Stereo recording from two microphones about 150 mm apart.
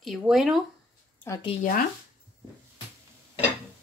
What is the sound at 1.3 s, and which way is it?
Speech, 15° left (ahead or behind).